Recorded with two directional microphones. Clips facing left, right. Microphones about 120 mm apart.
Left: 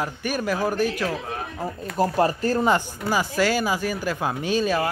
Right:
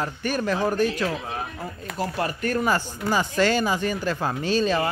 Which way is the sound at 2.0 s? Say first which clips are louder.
Left 6 dB; 35° left (ahead or behind).